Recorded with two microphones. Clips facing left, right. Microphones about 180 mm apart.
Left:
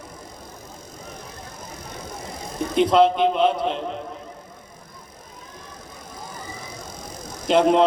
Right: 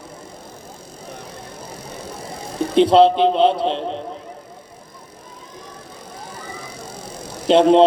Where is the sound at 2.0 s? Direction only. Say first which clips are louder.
Right 2 dB; 30° right (ahead or behind).